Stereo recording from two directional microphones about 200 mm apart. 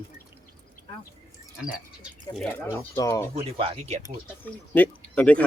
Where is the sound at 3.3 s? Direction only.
30° right (ahead or behind).